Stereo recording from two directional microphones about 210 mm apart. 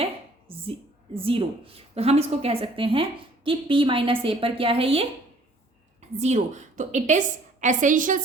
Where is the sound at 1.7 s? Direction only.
30° right (ahead or behind).